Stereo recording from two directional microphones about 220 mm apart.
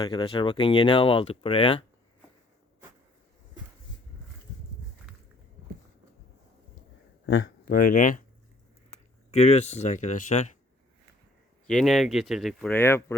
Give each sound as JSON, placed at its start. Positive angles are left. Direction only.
{"t": 0.0, "sound": "speech", "side_deg": 20}
{"t": 7.3, "sound": "a sound", "side_deg": 55}
{"t": 7.7, "sound": "speech", "side_deg": 40}
{"t": 9.3, "sound": "speech", "side_deg": 30}
{"t": 11.6, "sound": "speech", "side_deg": 0}